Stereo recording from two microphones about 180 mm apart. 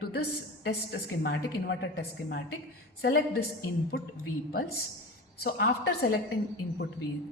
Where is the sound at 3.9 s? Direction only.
75° left (ahead or behind).